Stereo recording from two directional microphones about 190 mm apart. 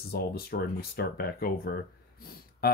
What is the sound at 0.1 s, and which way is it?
Speech, 55° left (ahead or behind).